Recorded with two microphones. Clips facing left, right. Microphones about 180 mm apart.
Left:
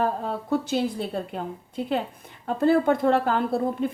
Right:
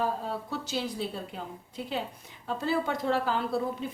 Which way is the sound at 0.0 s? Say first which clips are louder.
Left 5 dB; 55° left (ahead or behind).